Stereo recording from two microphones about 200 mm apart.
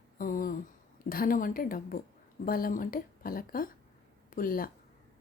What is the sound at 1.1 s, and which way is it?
Speech, 45° left (ahead or behind).